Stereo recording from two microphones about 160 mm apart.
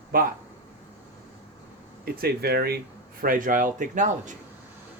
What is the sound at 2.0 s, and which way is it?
Speech, 75° right (ahead or behind).